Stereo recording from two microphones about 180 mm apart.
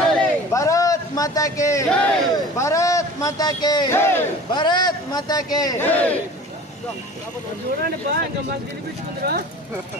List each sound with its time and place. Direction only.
0.0 s a sound: centre (ahead or behind)
0.5 s a sound: 20° left (ahead or behind)
1.9 s speech: 5° left (ahead or behind)
2.3 s speech: 15° left (ahead or behind)
4.5 s a man's voice: 25° left (ahead or behind)
5.9 s speech: 10° left (ahead or behind)